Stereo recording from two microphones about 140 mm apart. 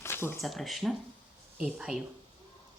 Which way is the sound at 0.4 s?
Centre (ahead or behind).